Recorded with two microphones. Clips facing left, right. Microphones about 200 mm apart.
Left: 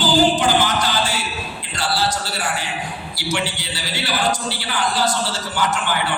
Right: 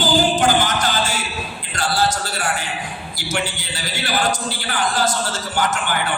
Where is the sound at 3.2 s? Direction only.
45° right (ahead or behind).